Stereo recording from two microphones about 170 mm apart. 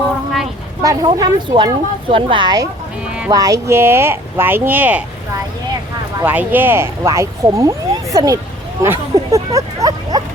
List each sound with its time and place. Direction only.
0.8 s speech: 25° right (ahead or behind)
6.1 s speech: 10° right (ahead or behind)
8.8 s a sound: 15° right (ahead or behind)